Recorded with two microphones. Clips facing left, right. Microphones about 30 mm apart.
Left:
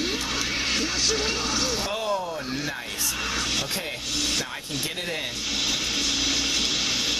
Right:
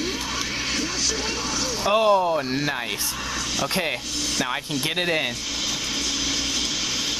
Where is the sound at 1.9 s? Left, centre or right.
Right.